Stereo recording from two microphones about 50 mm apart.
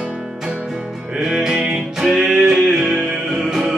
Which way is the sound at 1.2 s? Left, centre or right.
Centre.